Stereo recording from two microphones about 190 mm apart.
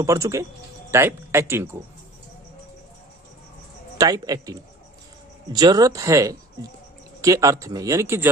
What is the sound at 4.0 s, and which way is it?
Speech, 20° right (ahead or behind).